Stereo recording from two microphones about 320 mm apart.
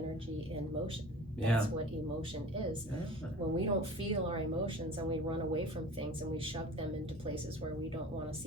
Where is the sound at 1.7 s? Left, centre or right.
Centre.